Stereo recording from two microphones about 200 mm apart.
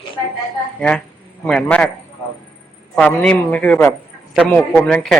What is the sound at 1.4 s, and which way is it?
Speech, 5° left (ahead or behind).